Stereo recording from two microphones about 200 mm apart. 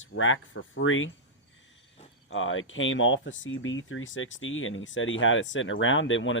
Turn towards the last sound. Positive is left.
turn(degrees=75)  # may be behind; listen again after turning